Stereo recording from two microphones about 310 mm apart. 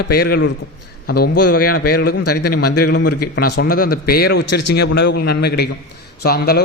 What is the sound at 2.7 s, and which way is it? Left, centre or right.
A man's voice, left.